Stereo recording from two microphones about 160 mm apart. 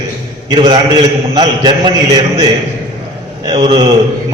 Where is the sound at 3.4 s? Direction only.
25° right (ahead or behind).